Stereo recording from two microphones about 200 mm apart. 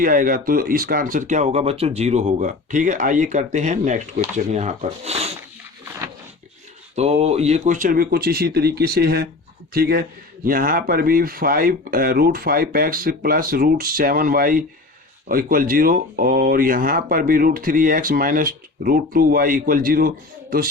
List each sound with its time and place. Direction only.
0.0 s speech: 45° right (ahead or behind)
6.9 s speech: 35° right (ahead or behind)